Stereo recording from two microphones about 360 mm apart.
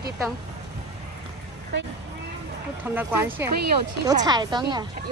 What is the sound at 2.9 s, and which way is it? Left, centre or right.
A woman's voice, centre.